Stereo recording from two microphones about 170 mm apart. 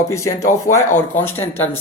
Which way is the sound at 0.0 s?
15° left (ahead or behind).